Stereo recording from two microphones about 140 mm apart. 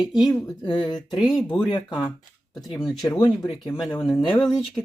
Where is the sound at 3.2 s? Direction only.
35° left (ahead or behind).